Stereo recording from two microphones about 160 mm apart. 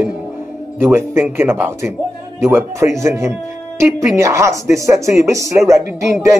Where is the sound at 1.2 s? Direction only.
15° right (ahead or behind).